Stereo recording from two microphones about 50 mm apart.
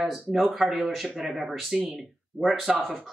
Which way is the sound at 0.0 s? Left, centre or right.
Centre.